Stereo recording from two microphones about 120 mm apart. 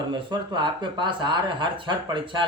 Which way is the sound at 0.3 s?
40° right (ahead or behind).